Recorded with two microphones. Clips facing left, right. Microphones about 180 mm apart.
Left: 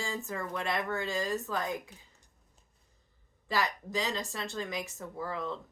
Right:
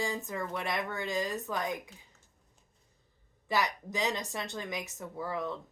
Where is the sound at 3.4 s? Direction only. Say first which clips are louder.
Right 1 dB; 15° right (ahead or behind).